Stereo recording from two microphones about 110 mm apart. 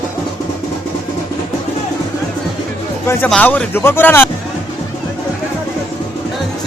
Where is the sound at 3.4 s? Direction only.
15° left (ahead or behind).